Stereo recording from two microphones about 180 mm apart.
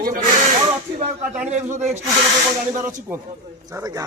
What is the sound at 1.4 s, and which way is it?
Speech, 40° right (ahead or behind).